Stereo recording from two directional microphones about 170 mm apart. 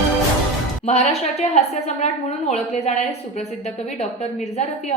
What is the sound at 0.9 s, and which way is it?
A woman's voice, 40° left (ahead or behind).